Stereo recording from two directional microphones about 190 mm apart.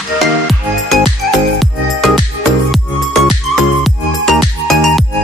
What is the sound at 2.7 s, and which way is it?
Music, centre (ahead or behind).